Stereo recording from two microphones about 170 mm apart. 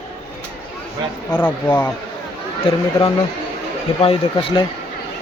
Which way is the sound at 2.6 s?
30° left (ahead or behind).